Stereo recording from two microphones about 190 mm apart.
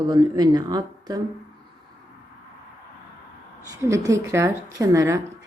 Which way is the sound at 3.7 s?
15° right (ahead or behind).